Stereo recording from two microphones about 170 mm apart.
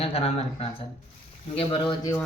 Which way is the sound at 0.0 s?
35° left (ahead or behind).